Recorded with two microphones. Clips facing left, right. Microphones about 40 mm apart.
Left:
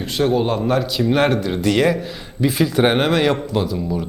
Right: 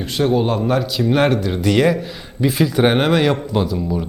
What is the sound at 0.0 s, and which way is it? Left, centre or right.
Speech, centre.